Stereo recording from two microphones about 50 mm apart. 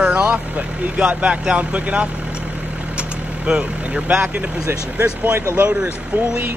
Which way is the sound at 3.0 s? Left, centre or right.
Centre.